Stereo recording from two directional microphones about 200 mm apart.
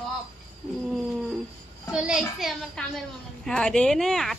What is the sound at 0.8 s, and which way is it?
Speech, centre (ahead or behind).